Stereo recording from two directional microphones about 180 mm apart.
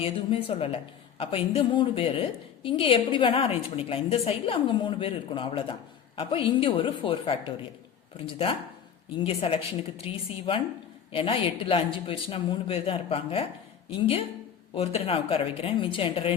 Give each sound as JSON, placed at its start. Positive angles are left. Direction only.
{"t": 0.0, "sound": "a woman's voice", "side_deg": 30}
{"t": 14.8, "sound": "speech", "side_deg": 35}